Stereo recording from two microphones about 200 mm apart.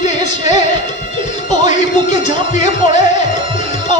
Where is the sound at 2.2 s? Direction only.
35° left (ahead or behind).